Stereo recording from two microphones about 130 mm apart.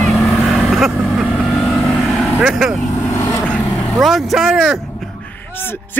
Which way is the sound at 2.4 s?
5° right (ahead or behind).